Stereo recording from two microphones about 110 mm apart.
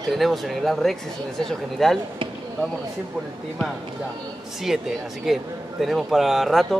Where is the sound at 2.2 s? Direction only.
50° right (ahead or behind).